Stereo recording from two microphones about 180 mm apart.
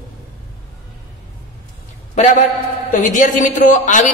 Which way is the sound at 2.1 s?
40° left (ahead or behind).